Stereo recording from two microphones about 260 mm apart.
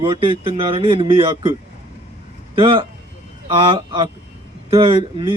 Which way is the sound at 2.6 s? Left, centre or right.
Centre.